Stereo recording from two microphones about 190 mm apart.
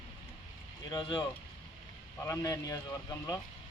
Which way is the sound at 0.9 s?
20° left (ahead or behind).